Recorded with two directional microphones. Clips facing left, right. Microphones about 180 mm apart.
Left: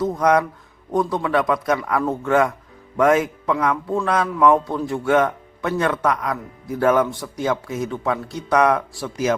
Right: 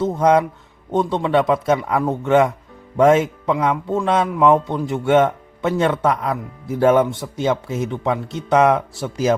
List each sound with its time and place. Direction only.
0.0 s a man's voice: 25° right (ahead or behind)